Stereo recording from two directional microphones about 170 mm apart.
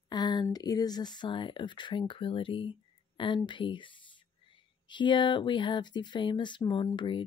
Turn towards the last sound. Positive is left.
turn(degrees=30)  # may be behind; listen again after turning